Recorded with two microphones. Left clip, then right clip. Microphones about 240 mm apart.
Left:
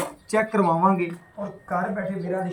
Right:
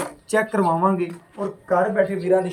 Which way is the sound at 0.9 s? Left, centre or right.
Right.